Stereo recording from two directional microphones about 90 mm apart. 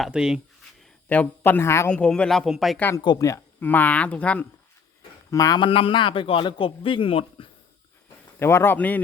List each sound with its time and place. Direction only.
0.0 s speech: 10° right (ahead or behind)
1.0 s speech: 15° left (ahead or behind)
1.9 s speech: 10° left (ahead or behind)
3.2 s speech: 35° left (ahead or behind)
3.6 s speech: 20° left (ahead or behind)
5.3 s speech: 40° left (ahead or behind)
5.5 s a man's voice: 75° left (ahead or behind)
8.4 s speech: 30° left (ahead or behind)